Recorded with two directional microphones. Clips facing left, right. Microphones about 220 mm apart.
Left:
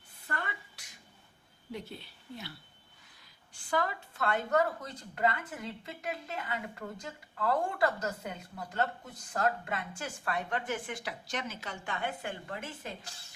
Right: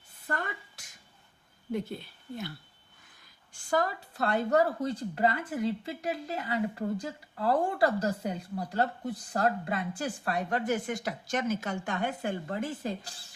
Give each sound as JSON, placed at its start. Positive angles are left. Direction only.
{"t": 0.3, "sound": "a woman's voice", "side_deg": -45}
{"t": 3.7, "sound": "speech", "side_deg": -40}